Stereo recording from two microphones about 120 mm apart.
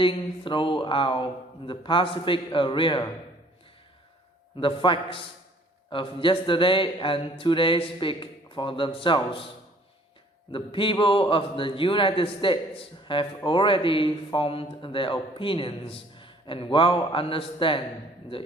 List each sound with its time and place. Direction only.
0.0 s speech: 45° left (ahead or behind)
4.5 s speech: 45° left (ahead or behind)
10.5 s speech: 45° left (ahead or behind)